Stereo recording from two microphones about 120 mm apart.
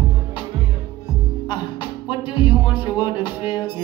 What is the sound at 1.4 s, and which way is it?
Music, 40° left (ahead or behind).